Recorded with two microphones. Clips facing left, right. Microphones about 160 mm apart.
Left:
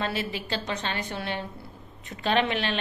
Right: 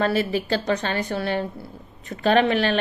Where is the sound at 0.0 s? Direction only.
45° right (ahead or behind).